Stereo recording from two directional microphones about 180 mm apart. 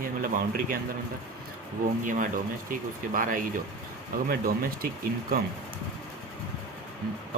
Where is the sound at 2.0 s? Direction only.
45° right (ahead or behind).